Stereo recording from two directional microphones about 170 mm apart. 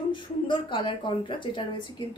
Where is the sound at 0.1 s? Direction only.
30° left (ahead or behind).